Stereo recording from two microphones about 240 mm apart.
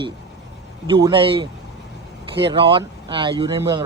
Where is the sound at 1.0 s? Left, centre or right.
Centre.